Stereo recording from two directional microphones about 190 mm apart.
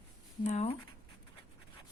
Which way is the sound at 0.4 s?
40° left (ahead or behind).